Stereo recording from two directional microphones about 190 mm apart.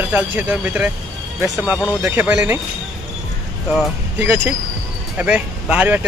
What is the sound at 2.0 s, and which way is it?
Speech, 10° right (ahead or behind).